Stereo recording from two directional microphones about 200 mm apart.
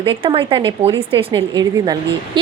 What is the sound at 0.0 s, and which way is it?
Speech, 25° right (ahead or behind).